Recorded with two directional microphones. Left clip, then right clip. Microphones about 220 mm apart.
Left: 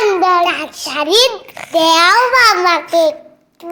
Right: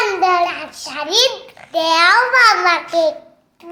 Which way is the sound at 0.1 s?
30° left (ahead or behind).